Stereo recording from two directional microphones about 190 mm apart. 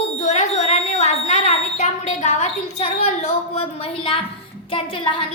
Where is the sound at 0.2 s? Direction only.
35° left (ahead or behind).